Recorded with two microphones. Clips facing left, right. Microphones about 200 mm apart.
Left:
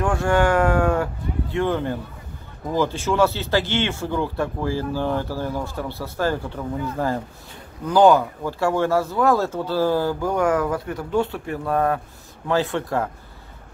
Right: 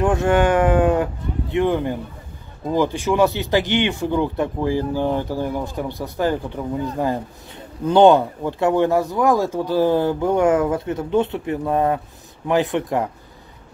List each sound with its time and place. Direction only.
0.0 s speech: 20° right (ahead or behind)